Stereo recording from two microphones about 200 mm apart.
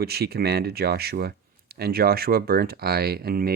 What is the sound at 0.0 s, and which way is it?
Speech, 50° right (ahead or behind).